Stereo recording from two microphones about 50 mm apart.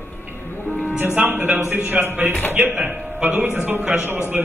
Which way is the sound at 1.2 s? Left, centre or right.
Right.